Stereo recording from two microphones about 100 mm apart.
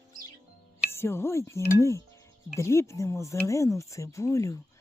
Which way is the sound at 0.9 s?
25° left (ahead or behind).